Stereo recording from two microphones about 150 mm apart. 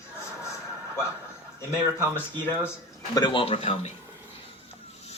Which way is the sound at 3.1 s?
30° left (ahead or behind).